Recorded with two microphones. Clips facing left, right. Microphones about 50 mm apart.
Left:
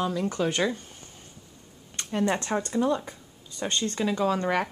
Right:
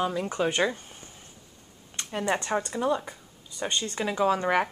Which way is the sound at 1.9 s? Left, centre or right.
Centre.